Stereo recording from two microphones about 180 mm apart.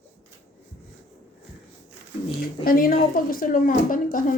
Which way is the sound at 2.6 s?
55° left (ahead or behind).